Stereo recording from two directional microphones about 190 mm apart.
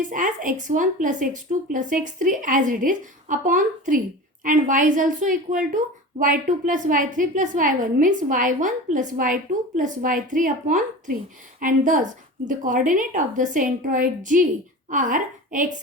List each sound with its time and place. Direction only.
0.0 s a woman's voice: 45° right (ahead or behind)